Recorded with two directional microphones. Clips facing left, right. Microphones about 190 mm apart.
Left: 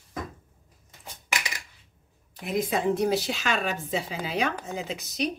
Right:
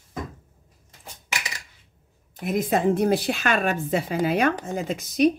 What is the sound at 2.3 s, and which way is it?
A woman's voice, 50° right (ahead or behind).